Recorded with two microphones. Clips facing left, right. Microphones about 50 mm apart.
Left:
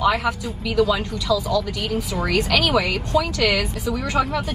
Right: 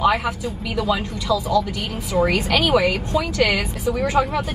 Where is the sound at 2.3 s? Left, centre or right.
Right.